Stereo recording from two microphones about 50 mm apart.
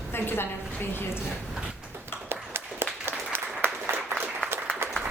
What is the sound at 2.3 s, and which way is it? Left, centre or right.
Applause, right.